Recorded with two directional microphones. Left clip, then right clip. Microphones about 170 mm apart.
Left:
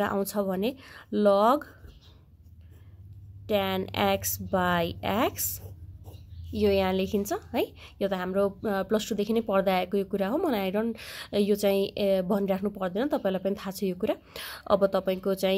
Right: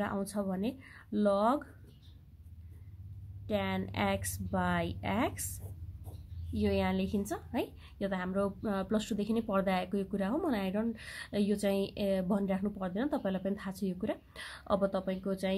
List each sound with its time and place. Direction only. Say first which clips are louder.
0.0 s speech: left 8 dB; 35° left (ahead or behind)
3.4 s a woman's voice: left 8 dB; 30° left (ahead or behind)
6.5 s a woman's voice: left 8 dB; 30° left (ahead or behind)